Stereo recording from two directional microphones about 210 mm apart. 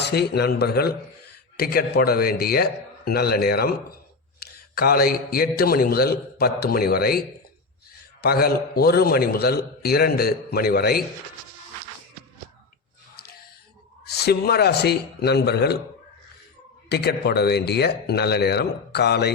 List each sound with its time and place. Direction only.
0.0 s a man's voice: 50° left (ahead or behind)
8.2 s a man's voice: 45° left (ahead or behind)
14.3 s a man's voice: 50° left (ahead or behind)
16.9 s a man's voice: 50° left (ahead or behind)